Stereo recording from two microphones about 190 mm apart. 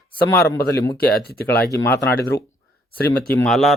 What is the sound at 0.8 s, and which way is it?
Speech, 15° left (ahead or behind).